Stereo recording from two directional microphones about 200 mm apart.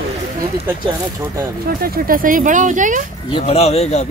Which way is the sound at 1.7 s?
45° right (ahead or behind).